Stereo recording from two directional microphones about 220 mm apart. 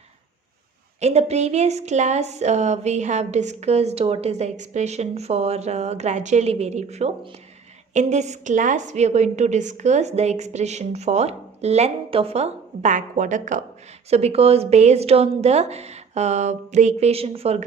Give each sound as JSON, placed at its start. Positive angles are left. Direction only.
{"t": 0.9, "sound": "a woman's voice", "side_deg": -30}